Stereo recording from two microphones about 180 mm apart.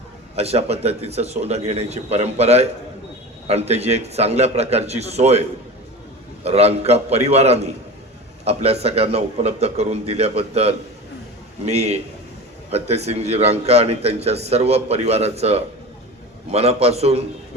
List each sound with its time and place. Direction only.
0.3 s a man's voice: 35° right (ahead or behind)
6.4 s a man's voice: 35° right (ahead or behind)